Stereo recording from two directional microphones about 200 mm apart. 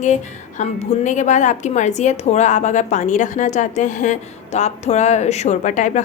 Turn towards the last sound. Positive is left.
turn(degrees=40)  # may be behind; listen again after turning